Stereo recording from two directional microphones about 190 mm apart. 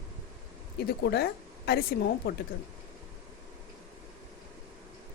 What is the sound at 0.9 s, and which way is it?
Speech, 55° left (ahead or behind).